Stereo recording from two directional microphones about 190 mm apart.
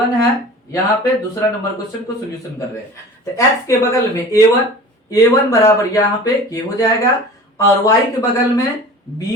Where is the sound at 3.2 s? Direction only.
15° left (ahead or behind).